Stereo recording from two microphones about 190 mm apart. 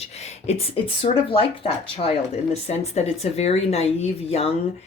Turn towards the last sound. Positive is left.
turn(degrees=30)  # may be behind; listen again after turning